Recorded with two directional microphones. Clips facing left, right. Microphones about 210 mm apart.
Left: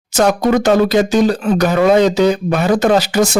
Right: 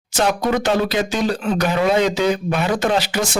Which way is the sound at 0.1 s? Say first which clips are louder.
Left 6 dB; 45° left (ahead or behind).